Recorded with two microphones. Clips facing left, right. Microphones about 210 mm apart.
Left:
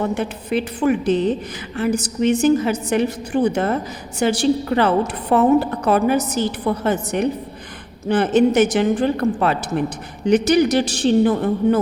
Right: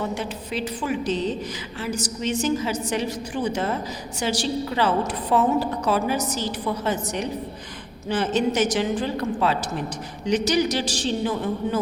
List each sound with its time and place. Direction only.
0.0 s a woman's voice: 55° left (ahead or behind)